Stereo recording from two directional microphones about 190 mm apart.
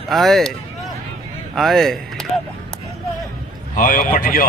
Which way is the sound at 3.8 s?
45° left (ahead or behind).